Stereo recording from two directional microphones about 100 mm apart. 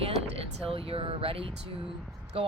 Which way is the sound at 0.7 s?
70° right (ahead or behind).